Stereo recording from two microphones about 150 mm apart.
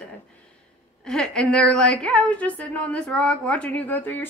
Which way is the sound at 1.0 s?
5° left (ahead or behind).